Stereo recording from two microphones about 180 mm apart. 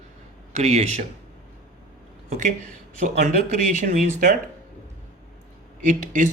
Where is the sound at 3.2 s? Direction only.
45° right (ahead or behind).